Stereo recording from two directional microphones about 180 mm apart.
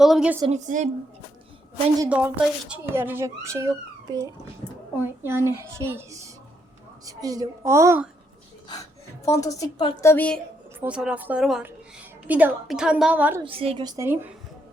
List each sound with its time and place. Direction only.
0.0 s a woman's voice: 5° right (ahead or behind)
0.5 s a woman's voice: 40° right (ahead or behind)
2.0 s speech: 10° right (ahead or behind)
9.2 s a woman's voice: 20° left (ahead or behind)
10.8 s speech: 5° right (ahead or behind)
13.4 s a woman's voice: 30° right (ahead or behind); by 14.3 s 10° right (ahead or behind)